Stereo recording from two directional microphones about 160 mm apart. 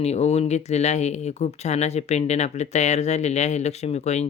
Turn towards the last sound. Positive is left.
turn(degrees=45)  # may be behind; listen again after turning